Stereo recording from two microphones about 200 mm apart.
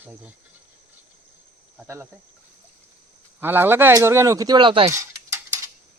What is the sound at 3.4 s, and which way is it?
Speech, 10° right (ahead or behind).